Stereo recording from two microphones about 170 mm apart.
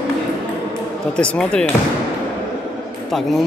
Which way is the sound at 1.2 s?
5° left (ahead or behind).